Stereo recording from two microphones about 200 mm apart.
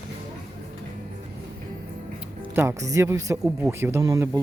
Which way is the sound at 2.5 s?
10° right (ahead or behind).